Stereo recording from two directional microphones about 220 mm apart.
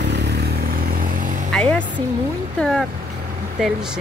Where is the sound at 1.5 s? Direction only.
5° left (ahead or behind).